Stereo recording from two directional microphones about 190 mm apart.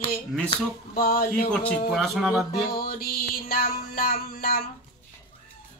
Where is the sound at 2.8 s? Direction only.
50° left (ahead or behind).